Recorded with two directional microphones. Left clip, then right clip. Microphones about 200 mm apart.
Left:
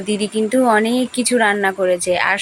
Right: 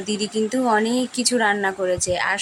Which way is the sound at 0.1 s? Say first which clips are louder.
Left 5 dB; 10° left (ahead or behind).